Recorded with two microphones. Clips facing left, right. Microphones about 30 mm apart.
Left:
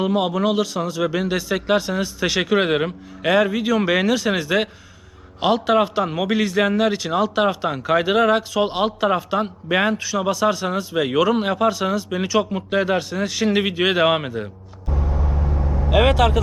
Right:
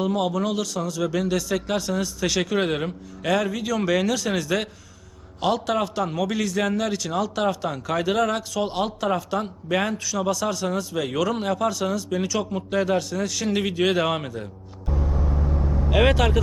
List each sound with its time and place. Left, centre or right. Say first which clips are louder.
0.0 s a man's voice: left 4 dB; left
14.9 s vehicle: left 1 dB; left
16.0 s speech: left 3 dB; centre